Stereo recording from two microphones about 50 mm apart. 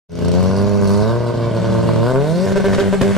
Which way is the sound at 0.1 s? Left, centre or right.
Centre.